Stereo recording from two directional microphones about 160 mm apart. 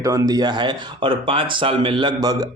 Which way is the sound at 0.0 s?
20° right (ahead or behind).